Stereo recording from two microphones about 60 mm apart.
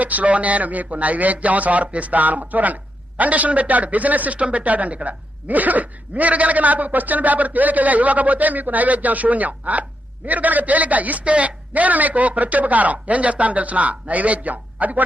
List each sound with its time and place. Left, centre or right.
0.0 s speech: right